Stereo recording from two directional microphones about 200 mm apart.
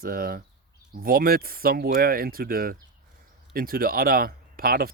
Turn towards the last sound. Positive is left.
turn(degrees=-45)  # may be behind; listen again after turning